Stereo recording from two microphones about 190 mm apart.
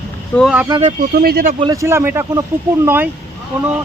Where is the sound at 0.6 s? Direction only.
20° right (ahead or behind).